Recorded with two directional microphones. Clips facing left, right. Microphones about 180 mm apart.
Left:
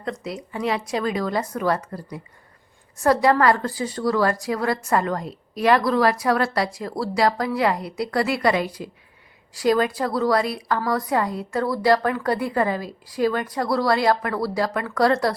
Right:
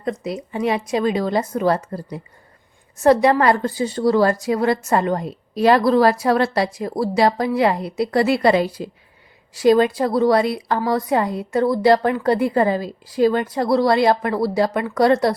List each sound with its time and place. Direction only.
0.0 s a woman's voice: 20° right (ahead or behind)